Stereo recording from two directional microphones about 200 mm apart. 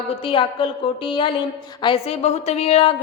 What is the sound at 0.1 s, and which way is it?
A woman's voice, 25° left (ahead or behind).